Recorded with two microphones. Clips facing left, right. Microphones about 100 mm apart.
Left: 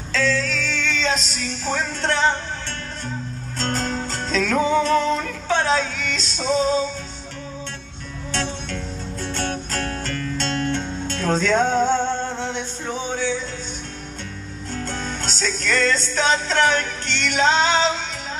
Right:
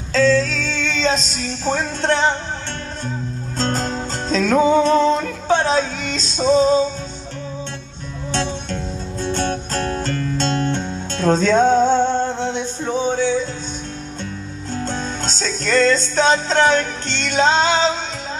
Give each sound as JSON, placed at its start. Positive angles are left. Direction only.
{"t": 0.1, "sound": "music", "side_deg": -30}
{"t": 3.5, "sound": "music", "side_deg": -30}
{"t": 8.3, "sound": "music", "side_deg": -25}
{"t": 14.7, "sound": "music", "side_deg": -25}